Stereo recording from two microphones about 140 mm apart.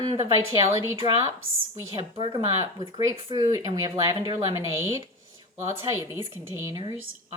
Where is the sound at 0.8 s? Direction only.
20° right (ahead or behind).